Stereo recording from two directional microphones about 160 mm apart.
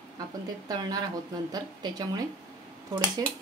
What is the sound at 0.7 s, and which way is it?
Speech, 25° right (ahead or behind).